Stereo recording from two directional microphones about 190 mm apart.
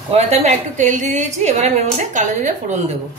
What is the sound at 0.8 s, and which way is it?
A woman's voice, 40° right (ahead or behind).